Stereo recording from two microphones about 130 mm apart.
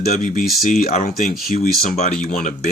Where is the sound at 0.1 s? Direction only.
90° left.